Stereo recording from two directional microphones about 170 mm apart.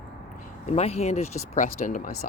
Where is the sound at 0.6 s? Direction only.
40° left (ahead or behind).